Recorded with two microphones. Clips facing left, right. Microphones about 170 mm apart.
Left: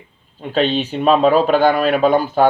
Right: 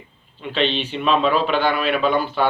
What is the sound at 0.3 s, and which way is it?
A man's voice, 45° left (ahead or behind).